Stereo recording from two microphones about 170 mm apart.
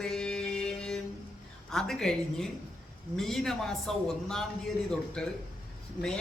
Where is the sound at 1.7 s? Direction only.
5° left (ahead or behind).